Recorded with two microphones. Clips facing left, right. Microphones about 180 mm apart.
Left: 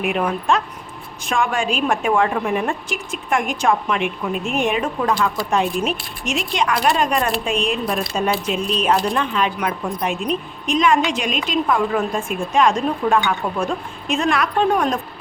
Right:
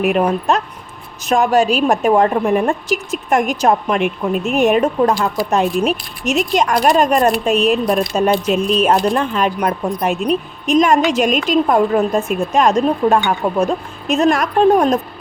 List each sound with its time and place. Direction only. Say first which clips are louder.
0.0 s a woman's voice: right 6 dB; 40° right (ahead or behind)
7.5 s speech: right 7 dB; 5° right (ahead or behind)
7.9 s a woman's voice: right 6 dB; 45° right (ahead or behind)